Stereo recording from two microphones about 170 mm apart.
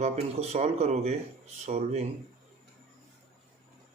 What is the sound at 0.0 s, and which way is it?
Speech, 40° right (ahead or behind).